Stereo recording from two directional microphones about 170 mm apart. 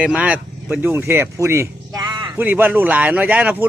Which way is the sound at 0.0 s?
5° right (ahead or behind).